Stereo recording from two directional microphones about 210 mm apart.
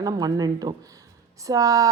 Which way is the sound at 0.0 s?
20° right (ahead or behind).